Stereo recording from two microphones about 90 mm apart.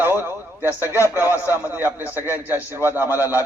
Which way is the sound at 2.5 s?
25° right (ahead or behind).